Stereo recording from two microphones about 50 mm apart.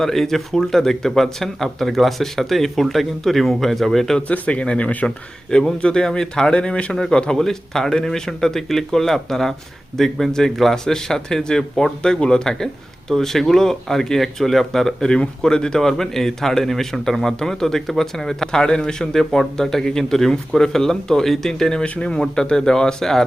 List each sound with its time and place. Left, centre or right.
0.0 s speech: centre
4.3 s speech: left
5.0 s a man's voice: centre
21.8 s a man's voice: left